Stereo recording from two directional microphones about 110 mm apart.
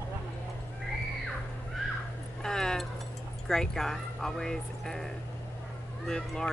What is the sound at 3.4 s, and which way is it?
Speech, 5° left (ahead or behind).